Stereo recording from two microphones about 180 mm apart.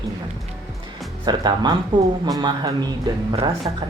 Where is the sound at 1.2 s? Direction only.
25° right (ahead or behind).